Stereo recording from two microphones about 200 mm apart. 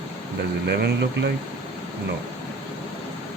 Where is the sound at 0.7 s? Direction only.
55° right (ahead or behind).